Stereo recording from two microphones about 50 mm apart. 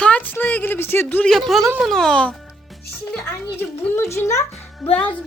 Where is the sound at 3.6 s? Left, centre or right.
Left.